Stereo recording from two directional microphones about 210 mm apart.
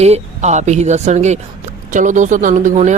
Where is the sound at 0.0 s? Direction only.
30° right (ahead or behind).